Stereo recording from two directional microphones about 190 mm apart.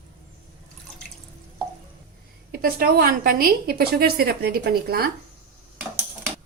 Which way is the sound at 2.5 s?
55° right (ahead or behind).